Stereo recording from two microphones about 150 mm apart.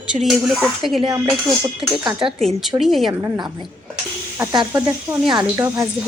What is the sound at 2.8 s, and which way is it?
Speech, centre (ahead or behind).